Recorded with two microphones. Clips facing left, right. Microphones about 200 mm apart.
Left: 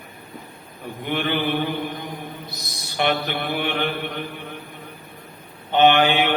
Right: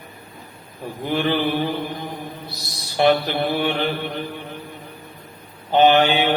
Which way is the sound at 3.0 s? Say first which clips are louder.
Right 5 dB; 35° right (ahead or behind).